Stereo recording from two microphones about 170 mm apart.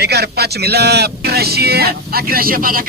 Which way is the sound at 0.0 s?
70° right (ahead or behind).